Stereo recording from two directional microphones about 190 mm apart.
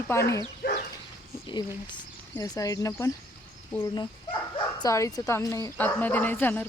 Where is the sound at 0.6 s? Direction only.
50° left (ahead or behind).